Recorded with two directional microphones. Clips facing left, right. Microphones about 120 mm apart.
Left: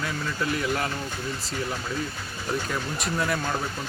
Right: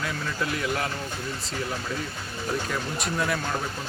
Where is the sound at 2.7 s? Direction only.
Centre (ahead or behind).